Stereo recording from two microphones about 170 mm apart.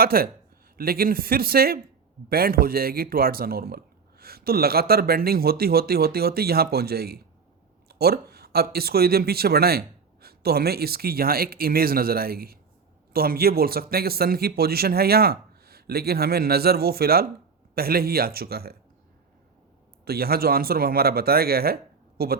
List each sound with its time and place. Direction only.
0.0 s speech: 60° right (ahead or behind)
20.1 s speech: 65° right (ahead or behind)